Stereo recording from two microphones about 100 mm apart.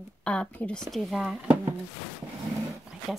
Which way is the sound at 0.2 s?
10° left (ahead or behind).